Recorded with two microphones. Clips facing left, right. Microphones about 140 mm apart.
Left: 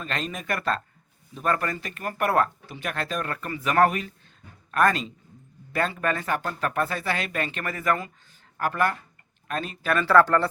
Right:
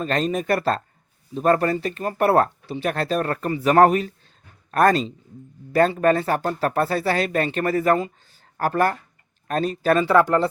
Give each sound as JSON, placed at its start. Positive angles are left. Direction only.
{"t": 0.0, "sound": "speech", "side_deg": -35}
{"t": 8.5, "sound": "speech", "side_deg": -40}
{"t": 10.0, "sound": "speech", "side_deg": -15}